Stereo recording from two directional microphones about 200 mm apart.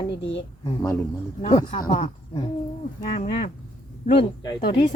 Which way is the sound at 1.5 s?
25° left (ahead or behind).